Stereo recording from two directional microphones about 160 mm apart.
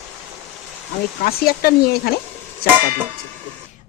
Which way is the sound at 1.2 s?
75° left (ahead or behind).